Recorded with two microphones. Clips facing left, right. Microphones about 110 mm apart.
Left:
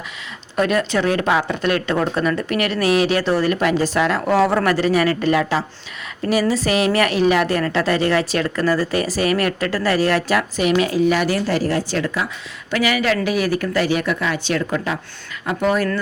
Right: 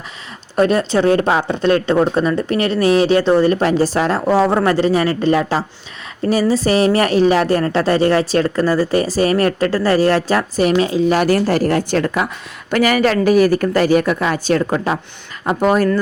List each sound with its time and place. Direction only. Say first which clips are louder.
0.5 s speech: right 4 dB; 30° right (ahead or behind)
6.7 s speech: right 4 dB; 35° right (ahead or behind)
11.1 s speech: right 4 dB; 45° right (ahead or behind)